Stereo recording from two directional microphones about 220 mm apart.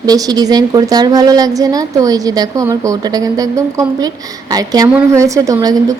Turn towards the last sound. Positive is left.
turn(degrees=-15)  # may be behind; listen again after turning